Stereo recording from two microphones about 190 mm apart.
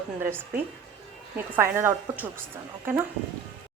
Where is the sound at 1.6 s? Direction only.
10° right (ahead or behind).